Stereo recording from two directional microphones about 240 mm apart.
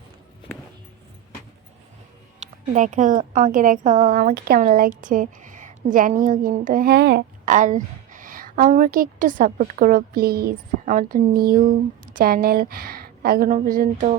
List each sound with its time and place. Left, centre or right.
2.4 s speech: right